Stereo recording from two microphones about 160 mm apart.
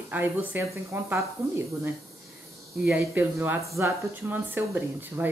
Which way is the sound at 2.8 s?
10° right (ahead or behind).